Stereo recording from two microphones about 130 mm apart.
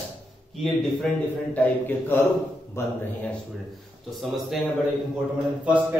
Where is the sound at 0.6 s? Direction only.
Centre (ahead or behind).